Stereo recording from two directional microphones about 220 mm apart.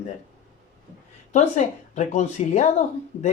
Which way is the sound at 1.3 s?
35° left (ahead or behind).